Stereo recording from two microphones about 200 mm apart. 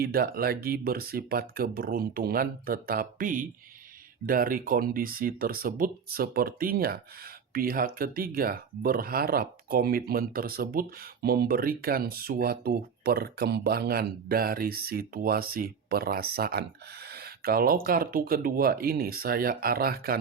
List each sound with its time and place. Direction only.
0.0 s speech: 50° right (ahead or behind)